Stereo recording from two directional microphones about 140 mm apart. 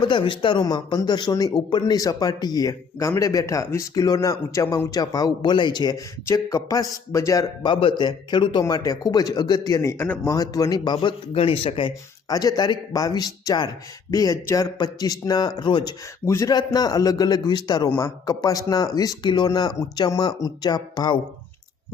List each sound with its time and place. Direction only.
0.0 s speech: 35° left (ahead or behind)
12.3 s speech: 25° left (ahead or behind)
16.2 s speech: 20° left (ahead or behind)